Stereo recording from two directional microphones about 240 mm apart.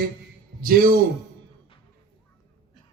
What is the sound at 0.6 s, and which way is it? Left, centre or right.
Speech, right.